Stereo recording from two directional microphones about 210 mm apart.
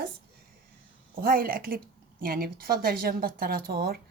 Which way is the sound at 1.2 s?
45° right (ahead or behind).